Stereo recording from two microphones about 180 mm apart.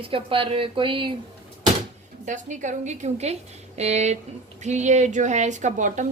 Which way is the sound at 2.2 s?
45° right (ahead or behind).